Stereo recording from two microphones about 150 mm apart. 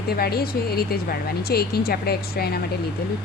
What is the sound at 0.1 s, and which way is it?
Speech, 90° left.